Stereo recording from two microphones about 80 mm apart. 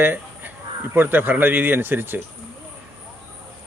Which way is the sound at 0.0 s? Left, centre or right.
Right.